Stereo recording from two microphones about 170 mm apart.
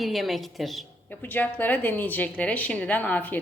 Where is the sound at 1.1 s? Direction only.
10° left (ahead or behind).